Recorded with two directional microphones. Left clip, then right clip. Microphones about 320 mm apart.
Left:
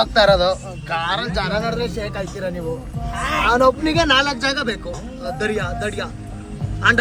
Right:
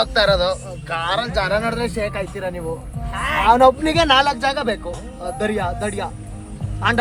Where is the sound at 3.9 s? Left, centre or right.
Right.